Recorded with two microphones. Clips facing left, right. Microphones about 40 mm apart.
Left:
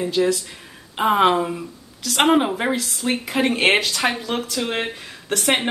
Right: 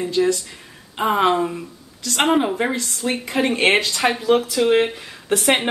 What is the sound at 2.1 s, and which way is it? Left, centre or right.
Speech, left.